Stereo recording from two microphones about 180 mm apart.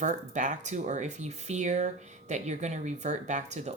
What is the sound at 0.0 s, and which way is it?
Speech, 45° right (ahead or behind).